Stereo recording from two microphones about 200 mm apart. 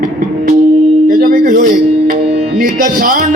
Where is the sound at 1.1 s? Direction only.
45° right (ahead or behind).